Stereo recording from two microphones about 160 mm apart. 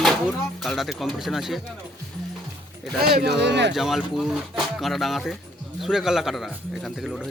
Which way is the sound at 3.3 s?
90° right.